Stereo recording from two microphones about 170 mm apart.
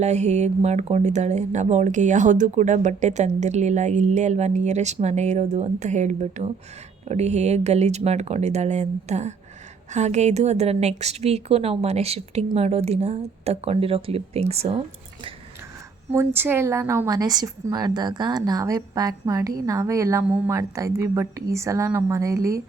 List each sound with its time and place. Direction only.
0.0 s a woman's voice: 40° right (ahead or behind)
16.1 s a woman's voice: 10° right (ahead or behind)